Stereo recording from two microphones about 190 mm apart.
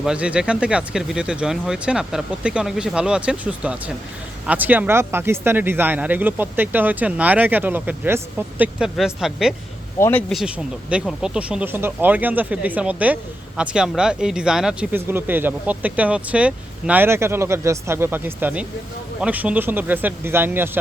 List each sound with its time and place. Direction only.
0.0 s speech: 5° right (ahead or behind)
10.0 s speech: 10° left (ahead or behind); by 20.7 s 10° right (ahead or behind)